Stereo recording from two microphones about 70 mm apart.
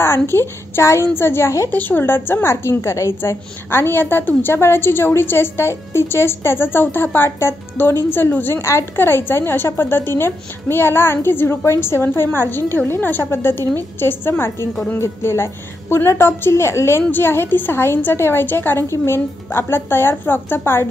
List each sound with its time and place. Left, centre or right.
0.0 s a woman's voice: left
1.7 s a woman's voice: left
8.5 s a woman's voice: left